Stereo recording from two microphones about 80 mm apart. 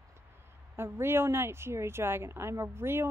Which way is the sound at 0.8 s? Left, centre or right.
Right.